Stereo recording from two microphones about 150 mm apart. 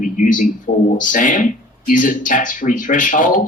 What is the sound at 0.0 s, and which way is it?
Speech, 60° left (ahead or behind).